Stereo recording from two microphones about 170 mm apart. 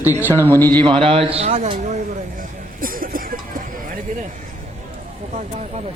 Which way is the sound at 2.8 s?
55° right (ahead or behind).